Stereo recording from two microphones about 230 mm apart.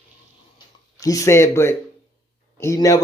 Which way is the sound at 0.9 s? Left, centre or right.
Centre.